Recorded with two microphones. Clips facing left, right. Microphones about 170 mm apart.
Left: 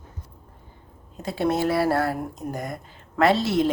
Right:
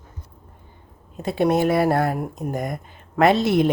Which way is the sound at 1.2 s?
20° right (ahead or behind).